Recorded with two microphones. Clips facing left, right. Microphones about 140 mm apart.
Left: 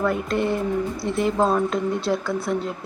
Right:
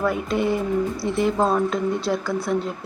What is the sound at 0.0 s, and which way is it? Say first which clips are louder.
Speech: even; 5° right (ahead or behind).